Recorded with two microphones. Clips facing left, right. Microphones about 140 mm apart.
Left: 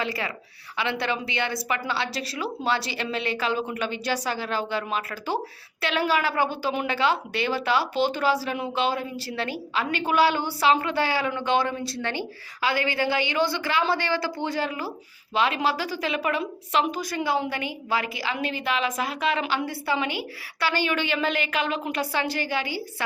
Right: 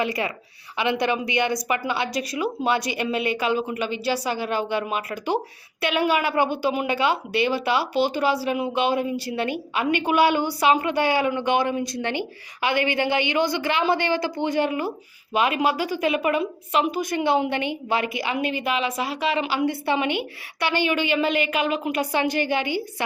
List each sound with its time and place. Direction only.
0.0 s a woman's voice: 20° right (ahead or behind)
16.4 s a woman's voice: 5° right (ahead or behind)
17.0 s a woman's voice: 20° right (ahead or behind)
18.6 s a woman's voice: 5° right (ahead or behind)
19.8 s a woman's voice: 20° right (ahead or behind)